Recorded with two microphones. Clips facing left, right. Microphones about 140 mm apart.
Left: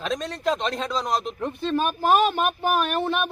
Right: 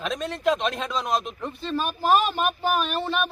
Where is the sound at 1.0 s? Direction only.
35° left (ahead or behind).